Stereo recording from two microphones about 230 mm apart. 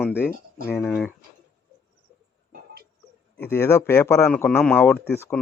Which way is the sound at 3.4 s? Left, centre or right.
Centre.